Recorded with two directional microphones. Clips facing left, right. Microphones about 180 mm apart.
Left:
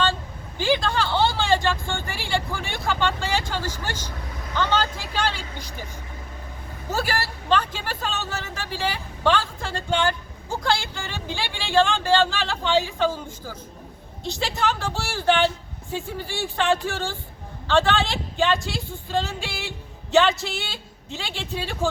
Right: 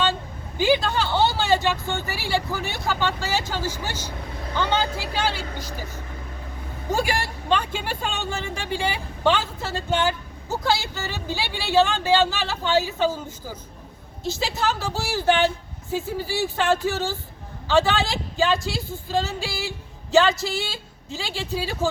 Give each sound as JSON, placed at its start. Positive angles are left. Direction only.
{"t": 0.0, "sound": "vehicle", "side_deg": -10}
{"t": 4.5, "sound": "speech", "side_deg": -10}
{"t": 5.3, "sound": "speech", "side_deg": -45}
{"t": 6.9, "sound": "a woman's voice", "side_deg": -15}